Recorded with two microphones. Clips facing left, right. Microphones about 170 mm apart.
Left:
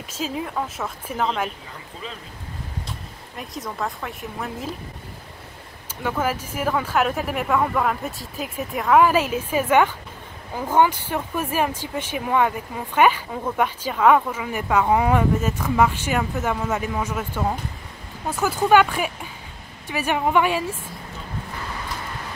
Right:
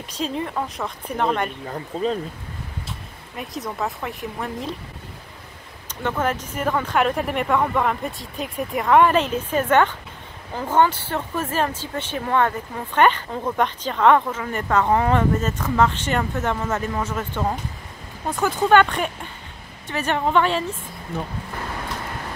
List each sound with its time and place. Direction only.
0.1 s speech: 5° left (ahead or behind)
1.7 s speech: 40° right (ahead or behind)
3.3 s speech: centre (ahead or behind)
6.0 s speech: 10° left (ahead or behind)
21.1 s speech: 60° right (ahead or behind)